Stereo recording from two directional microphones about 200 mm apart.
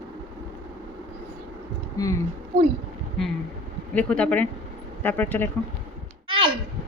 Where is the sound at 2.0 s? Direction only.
20° left (ahead or behind).